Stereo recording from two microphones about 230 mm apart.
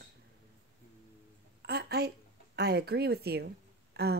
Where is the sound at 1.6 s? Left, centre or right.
Right.